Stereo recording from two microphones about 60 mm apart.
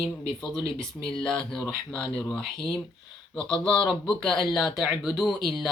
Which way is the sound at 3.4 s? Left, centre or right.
Centre.